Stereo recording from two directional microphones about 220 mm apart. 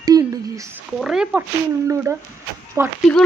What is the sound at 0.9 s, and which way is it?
Speech, centre (ahead or behind).